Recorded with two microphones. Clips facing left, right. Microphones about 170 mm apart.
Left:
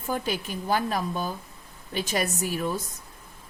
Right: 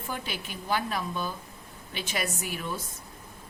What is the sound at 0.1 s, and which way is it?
A woman's voice, 40° left (ahead or behind).